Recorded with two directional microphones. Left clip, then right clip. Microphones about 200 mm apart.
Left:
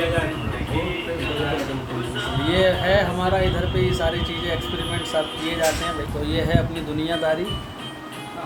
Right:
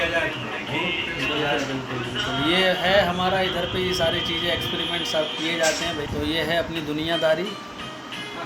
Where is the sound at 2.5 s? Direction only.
Centre (ahead or behind).